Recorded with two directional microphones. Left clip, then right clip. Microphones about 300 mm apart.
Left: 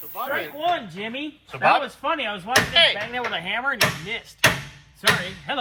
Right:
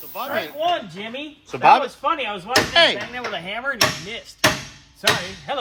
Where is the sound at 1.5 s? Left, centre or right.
Centre.